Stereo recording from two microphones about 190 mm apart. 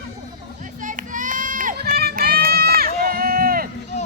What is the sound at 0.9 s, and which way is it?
Run, 45° right (ahead or behind).